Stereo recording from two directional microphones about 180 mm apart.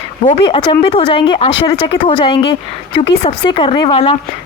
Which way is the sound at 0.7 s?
30° left (ahead or behind).